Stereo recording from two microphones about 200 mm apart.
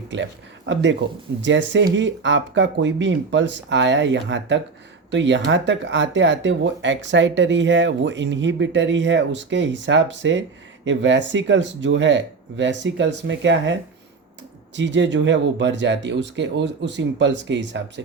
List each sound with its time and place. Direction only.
0.1 s speech: 65° right (ahead or behind)
14.8 s speech: 65° right (ahead or behind)